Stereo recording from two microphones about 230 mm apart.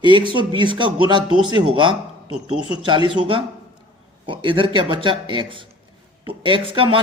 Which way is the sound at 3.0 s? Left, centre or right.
Right.